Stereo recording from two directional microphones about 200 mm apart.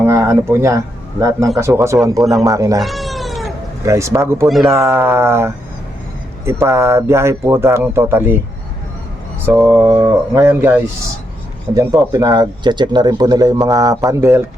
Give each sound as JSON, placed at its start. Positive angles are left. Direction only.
{"t": 0.0, "sound": "a sound", "side_deg": -15}
{"t": 1.5, "sound": "speech", "side_deg": -15}
{"t": 2.8, "sound": "cat", "side_deg": 0}
{"t": 3.8, "sound": "speech", "side_deg": -15}
{"t": 9.5, "sound": "speech", "side_deg": -10}